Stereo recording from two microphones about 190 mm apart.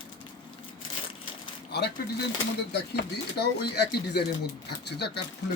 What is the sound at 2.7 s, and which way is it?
Speech, 60° left (ahead or behind).